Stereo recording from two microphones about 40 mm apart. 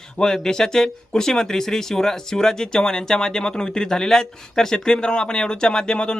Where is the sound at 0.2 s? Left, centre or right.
Centre.